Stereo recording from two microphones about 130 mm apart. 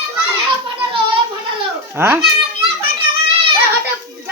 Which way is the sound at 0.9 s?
40° right (ahead or behind).